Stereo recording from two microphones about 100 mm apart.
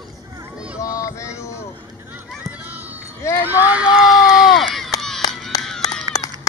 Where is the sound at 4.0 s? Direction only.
5° right (ahead or behind).